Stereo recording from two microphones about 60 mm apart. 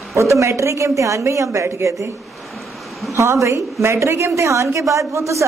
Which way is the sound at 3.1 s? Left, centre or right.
Right.